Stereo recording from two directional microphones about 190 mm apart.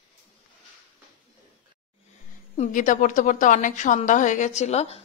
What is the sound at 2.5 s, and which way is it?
A woman's voice, 40° left (ahead or behind).